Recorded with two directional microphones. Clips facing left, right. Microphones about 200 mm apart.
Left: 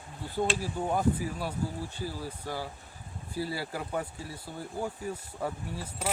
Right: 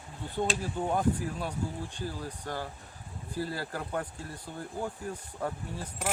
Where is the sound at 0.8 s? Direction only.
5° left (ahead or behind).